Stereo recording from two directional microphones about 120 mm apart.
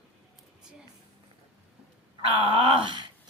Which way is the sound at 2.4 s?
45° right (ahead or behind).